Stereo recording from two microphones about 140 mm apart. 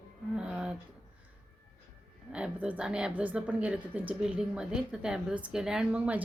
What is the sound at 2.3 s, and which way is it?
A woman's voice, 10° right (ahead or behind).